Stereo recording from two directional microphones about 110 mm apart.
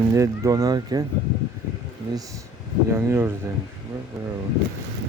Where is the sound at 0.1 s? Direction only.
30° right (ahead or behind).